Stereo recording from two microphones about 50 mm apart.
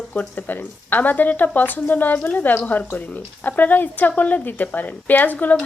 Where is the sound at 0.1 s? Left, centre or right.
Left.